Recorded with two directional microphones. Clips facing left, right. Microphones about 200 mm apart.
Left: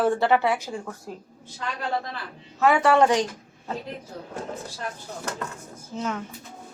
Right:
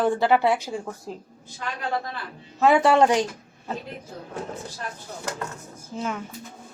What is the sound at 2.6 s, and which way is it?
Speech, 15° right (ahead or behind).